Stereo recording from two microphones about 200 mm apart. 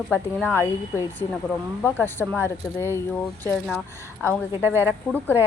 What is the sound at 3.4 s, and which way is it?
Speech, 5° left (ahead or behind).